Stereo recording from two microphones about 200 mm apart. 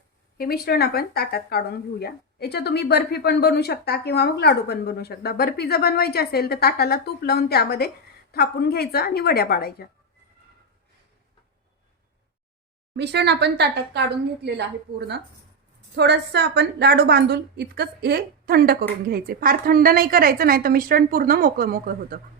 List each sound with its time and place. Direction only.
0.3 s speech: 50° left (ahead or behind)
13.0 s a woman's voice: 55° right (ahead or behind)